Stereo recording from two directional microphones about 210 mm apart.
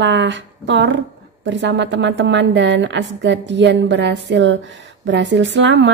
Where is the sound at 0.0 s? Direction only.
60° right (ahead or behind).